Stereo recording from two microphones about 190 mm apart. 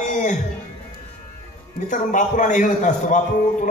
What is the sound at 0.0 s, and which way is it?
Music, 40° left (ahead or behind).